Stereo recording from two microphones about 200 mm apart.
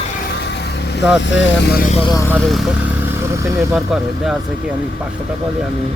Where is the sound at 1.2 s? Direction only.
65° left (ahead or behind).